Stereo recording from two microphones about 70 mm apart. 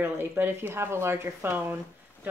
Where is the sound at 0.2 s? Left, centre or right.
Right.